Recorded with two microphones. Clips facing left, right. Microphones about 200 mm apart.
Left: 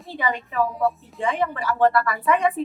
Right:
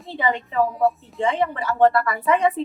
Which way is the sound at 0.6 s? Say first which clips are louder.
Right 2 dB; centre (ahead or behind).